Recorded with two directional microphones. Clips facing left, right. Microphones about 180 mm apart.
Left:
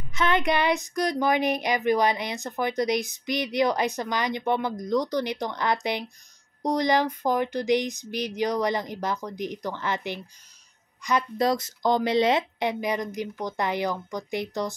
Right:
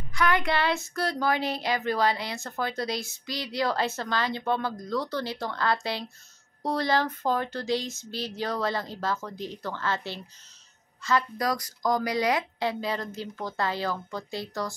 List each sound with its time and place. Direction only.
0.1 s a woman's voice: 20° left (ahead or behind)